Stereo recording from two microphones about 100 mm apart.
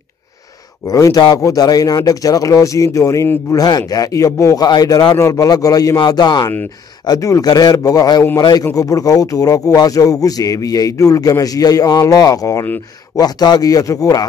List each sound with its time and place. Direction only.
0.8 s speech: 35° left (ahead or behind)
3.5 s speech: 40° left (ahead or behind)
7.1 s speech: 35° left (ahead or behind)